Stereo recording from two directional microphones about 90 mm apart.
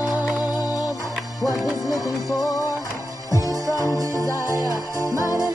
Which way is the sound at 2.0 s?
45° left (ahead or behind).